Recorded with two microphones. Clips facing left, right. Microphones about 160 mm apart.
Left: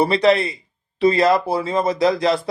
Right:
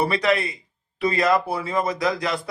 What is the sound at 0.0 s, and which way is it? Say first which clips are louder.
A man's voice: left 6 dB; 30° left (ahead or behind).